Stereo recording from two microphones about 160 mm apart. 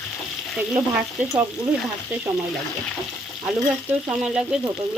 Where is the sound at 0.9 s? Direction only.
5° right (ahead or behind).